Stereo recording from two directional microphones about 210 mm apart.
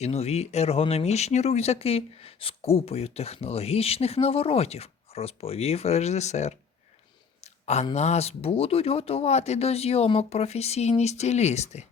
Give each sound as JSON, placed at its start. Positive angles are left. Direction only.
{"t": 0.0, "sound": "speech", "side_deg": 30}